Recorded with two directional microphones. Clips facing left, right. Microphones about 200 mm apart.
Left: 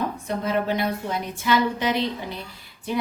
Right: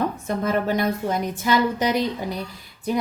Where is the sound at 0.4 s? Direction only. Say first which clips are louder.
Right 2 dB; 45° right (ahead or behind).